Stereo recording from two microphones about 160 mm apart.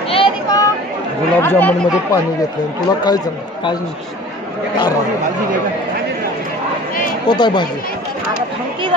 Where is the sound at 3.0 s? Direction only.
25° left (ahead or behind).